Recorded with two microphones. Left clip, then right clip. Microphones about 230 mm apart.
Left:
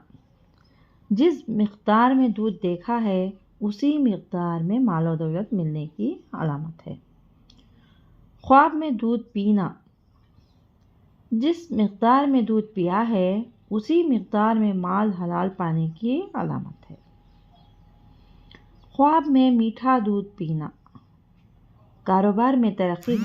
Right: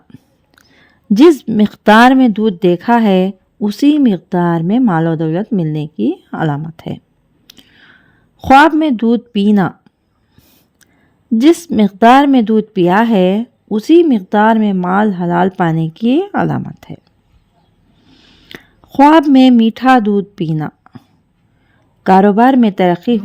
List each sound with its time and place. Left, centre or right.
0.8 s speech: right
8.4 s speech: right
11.3 s speech: right
18.4 s speech: right
22.0 s speech: right